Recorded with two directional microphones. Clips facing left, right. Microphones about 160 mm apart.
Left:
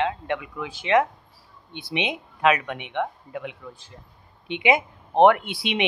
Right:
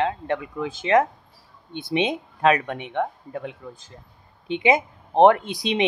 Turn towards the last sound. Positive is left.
turn(degrees=-40)  # may be behind; listen again after turning